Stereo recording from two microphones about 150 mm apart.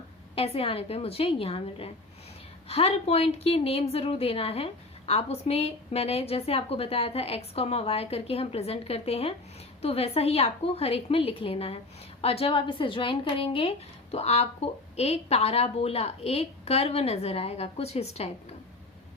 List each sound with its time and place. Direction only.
0.3 s a woman's voice: 40° left (ahead or behind)